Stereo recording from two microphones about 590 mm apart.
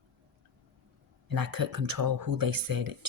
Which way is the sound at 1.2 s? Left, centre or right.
Right.